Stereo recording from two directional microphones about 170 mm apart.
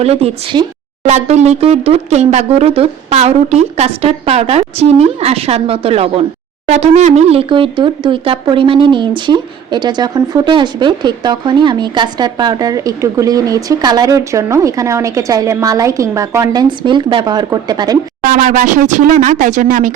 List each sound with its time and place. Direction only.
0.0 s speech: 35° right (ahead or behind)
18.2 s speech: 55° right (ahead or behind)